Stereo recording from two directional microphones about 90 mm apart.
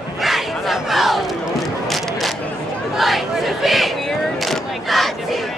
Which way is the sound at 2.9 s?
Centre (ahead or behind).